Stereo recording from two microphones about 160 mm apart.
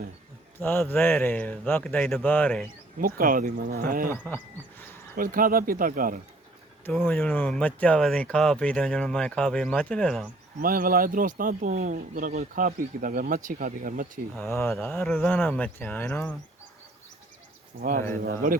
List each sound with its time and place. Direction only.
0.6 s speech: 15° left (ahead or behind)
3.0 s speech: 60° right (ahead or behind)
5.1 s speech: 60° right (ahead or behind)
7.0 s speech: 10° left (ahead or behind)
10.6 s speech: 65° right (ahead or behind)
14.3 s speech: 15° left (ahead or behind)
17.7 s speech: 65° right (ahead or behind)